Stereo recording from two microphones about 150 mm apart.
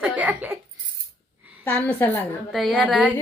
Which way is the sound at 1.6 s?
10° left (ahead or behind).